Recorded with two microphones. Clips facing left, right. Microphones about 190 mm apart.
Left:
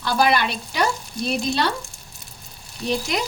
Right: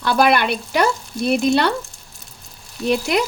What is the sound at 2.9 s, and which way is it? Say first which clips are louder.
Frying: right 5 dB; 60° right (ahead or behind).